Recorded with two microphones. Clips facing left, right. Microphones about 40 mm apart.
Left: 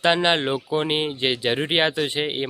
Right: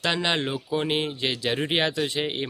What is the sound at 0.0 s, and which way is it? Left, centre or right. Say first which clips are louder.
Speech: left 6 dB; left.